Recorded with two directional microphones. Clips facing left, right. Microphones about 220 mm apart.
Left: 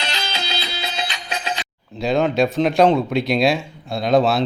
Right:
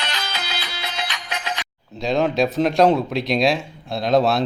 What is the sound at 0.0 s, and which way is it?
Music, 30° left (ahead or behind).